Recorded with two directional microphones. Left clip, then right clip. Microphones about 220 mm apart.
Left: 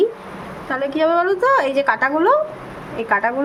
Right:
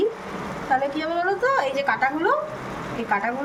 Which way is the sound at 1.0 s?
45° left (ahead or behind).